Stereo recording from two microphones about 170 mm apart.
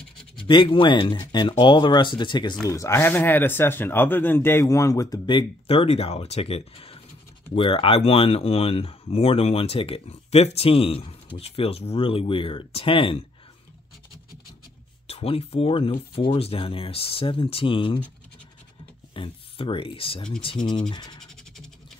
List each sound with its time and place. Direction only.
0.5 s speech: 30° left (ahead or behind)
15.0 s speech: 35° left (ahead or behind)
19.1 s speech: 30° left (ahead or behind)